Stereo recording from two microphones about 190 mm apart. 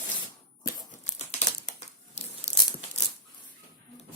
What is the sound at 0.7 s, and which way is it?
Crumpling, 35° left (ahead or behind).